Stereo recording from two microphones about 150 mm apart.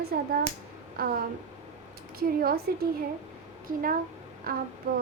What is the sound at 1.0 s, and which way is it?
Speech, 75° right (ahead or behind).